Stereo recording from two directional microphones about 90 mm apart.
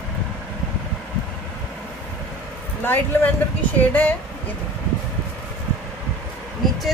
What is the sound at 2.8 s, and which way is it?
Speech, 20° left (ahead or behind).